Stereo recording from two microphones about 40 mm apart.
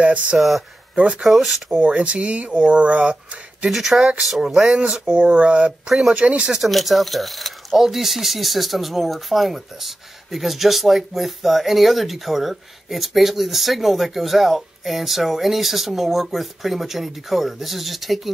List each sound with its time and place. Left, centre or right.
0.0 s speech: right
0.4 s speech: centre
0.9 s speech: right
1.2 s speech: centre
1.8 s speech: right
3.7 s speech: centre
4.7 s speech: right
5.9 s speech: centre
6.1 s speech: right
6.7 s speech: centre